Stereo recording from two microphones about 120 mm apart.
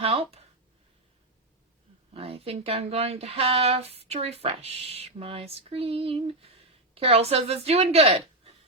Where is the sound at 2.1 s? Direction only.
55° right (ahead or behind).